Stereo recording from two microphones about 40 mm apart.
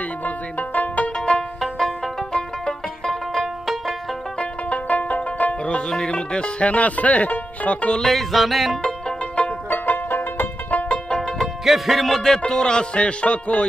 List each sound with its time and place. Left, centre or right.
0.2 s music: left
1.1 s music: left
2.3 s banjo: centre
4.4 s music: left
6.7 s speech: left
8.1 s music: centre
8.8 s music: left
9.7 s music: left
10.7 s music: left
11.6 s music: centre
12.2 s music: centre